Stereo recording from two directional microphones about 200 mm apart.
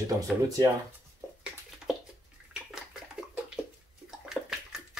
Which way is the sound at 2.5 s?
5° right (ahead or behind).